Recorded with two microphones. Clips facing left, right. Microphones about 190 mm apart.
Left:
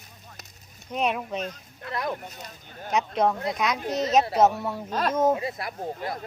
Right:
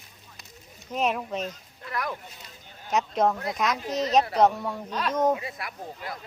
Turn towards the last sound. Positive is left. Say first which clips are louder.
# left 6 dB
turn(degrees=40)  # may be behind; listen again after turning